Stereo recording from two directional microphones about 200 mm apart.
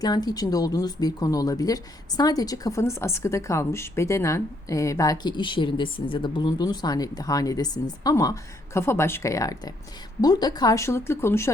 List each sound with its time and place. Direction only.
0.0 s speech: 20° left (ahead or behind)